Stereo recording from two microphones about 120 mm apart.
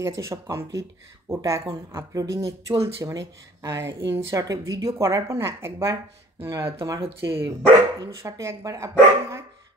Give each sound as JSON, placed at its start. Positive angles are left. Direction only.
{"t": 0.0, "sound": "speech", "side_deg": -25}